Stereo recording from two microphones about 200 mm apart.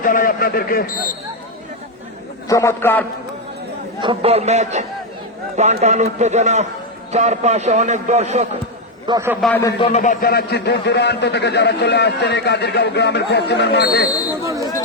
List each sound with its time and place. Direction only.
0.0 s a man's voice: 45° left (ahead or behind)
2.5 s a man's voice: 15° left (ahead or behind)
4.0 s a man's voice: 30° right (ahead or behind)
9.0 s a man's voice: 15° right (ahead or behind)
9.4 s a man's voice: 10° left (ahead or behind)
9.8 s a man's voice: 35° left (ahead or behind); by 13.8 s 55° left (ahead or behind)
14.4 s a sound: 15° right (ahead or behind)